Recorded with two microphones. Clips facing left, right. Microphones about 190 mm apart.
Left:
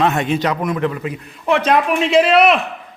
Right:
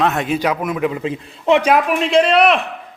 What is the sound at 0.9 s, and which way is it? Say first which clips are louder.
Speech: right 3 dB; 25° right (ahead or behind).